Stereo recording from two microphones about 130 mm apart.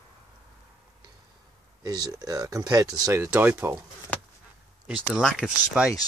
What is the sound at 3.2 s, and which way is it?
Speech, 15° right (ahead or behind).